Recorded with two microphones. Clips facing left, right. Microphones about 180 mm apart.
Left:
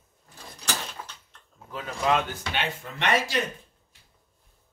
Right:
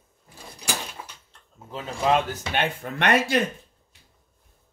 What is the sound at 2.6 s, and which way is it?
Speech, 55° right (ahead or behind).